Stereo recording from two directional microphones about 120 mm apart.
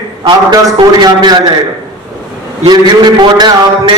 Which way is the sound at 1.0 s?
35° right (ahead or behind).